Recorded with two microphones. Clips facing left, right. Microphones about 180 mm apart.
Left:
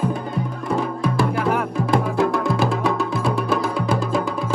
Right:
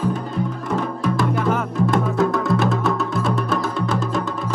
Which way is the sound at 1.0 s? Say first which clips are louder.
Even; centre (ahead or behind).